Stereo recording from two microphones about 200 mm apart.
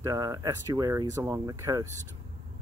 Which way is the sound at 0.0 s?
15° right (ahead or behind).